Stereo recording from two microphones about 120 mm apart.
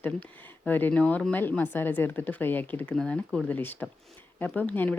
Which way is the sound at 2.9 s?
5° left (ahead or behind).